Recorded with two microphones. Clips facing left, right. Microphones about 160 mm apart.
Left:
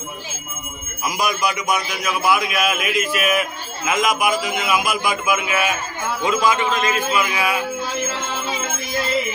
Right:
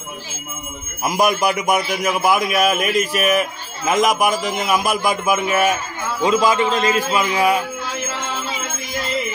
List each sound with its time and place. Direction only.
1.0 s a man's voice: 50° right (ahead or behind); by 7.4 s 35° right (ahead or behind)